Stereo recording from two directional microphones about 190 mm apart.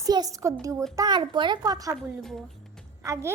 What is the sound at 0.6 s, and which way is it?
A woman's voice, 15° right (ahead or behind).